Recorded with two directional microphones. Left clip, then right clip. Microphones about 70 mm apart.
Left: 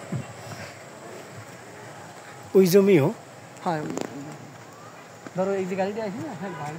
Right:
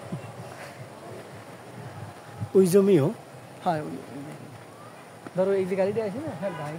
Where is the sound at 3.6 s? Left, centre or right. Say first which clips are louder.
Right 1 dB; centre.